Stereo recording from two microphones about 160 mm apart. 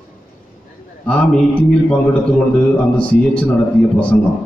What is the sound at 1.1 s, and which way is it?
A man's voice, 10° left (ahead or behind).